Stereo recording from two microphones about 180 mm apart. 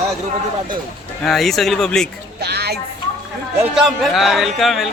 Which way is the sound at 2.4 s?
65° right (ahead or behind).